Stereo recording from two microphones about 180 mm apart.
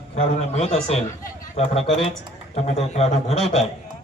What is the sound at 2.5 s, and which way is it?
Speech, 35° left (ahead or behind).